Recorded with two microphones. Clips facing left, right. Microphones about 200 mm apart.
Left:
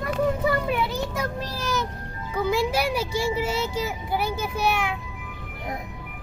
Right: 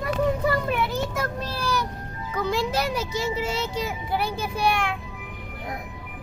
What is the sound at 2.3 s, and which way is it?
A child's voice, 10° left (ahead or behind).